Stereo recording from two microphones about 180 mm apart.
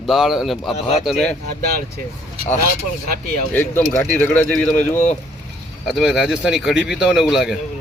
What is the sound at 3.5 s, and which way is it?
Speech, 10° left (ahead or behind).